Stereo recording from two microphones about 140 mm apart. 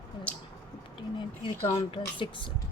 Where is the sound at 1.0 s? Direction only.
40° left (ahead or behind).